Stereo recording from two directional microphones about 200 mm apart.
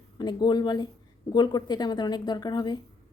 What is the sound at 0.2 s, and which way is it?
Speech, 20° left (ahead or behind).